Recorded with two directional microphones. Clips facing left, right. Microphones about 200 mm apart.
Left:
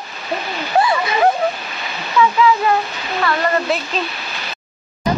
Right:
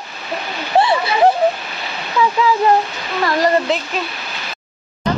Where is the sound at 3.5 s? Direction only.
20° right (ahead or behind).